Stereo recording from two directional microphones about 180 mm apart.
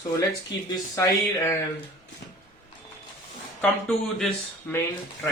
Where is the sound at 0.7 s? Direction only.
15° left (ahead or behind).